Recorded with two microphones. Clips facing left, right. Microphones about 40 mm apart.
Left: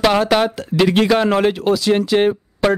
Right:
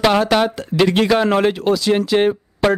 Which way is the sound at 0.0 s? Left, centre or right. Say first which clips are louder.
Even; centre.